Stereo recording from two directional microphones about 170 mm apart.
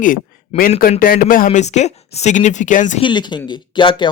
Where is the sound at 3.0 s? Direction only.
25° left (ahead or behind).